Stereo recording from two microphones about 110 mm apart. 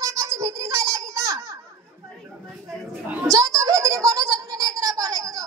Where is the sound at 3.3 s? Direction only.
30° right (ahead or behind).